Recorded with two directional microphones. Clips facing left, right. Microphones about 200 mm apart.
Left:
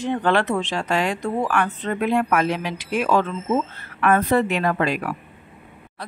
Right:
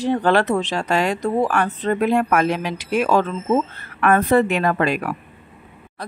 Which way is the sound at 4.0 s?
50° right (ahead or behind).